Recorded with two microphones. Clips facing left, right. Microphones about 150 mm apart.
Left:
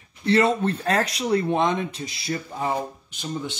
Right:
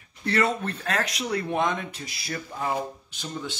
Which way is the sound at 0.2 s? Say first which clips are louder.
Left 5 dB; 25° left (ahead or behind).